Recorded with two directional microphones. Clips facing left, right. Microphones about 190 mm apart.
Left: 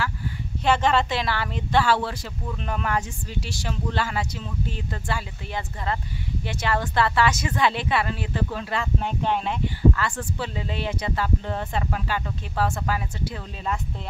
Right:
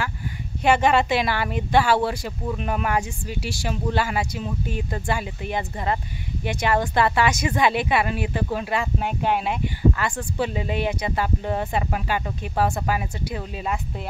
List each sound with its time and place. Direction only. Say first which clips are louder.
0.7 s a woman's voice: right 3 dB; 10° right (ahead or behind)